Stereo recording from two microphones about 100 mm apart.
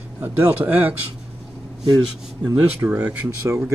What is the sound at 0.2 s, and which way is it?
Speech, 15° right (ahead or behind).